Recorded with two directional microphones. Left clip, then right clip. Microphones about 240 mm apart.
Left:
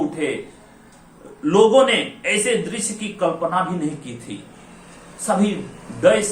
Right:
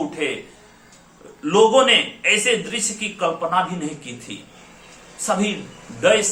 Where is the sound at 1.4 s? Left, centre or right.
Centre.